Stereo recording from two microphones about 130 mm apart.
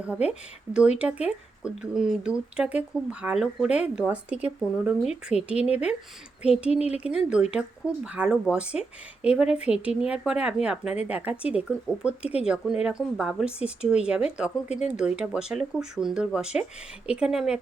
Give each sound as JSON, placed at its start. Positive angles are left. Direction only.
{"t": 0.0, "sound": "speech", "side_deg": -10}
{"t": 6.7, "sound": "speech", "side_deg": 55}
{"t": 6.9, "sound": "speech", "side_deg": -5}